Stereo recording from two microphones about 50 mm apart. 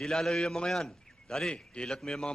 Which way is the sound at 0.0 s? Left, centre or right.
Centre.